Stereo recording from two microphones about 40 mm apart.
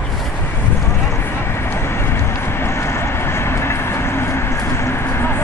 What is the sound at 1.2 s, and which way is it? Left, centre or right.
Vehicle, left.